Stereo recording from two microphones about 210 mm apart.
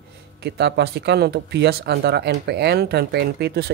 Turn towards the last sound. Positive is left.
turn(degrees=-50)  # may be behind; listen again after turning